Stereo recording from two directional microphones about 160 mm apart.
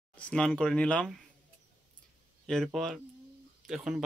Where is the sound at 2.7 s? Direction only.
Centre (ahead or behind).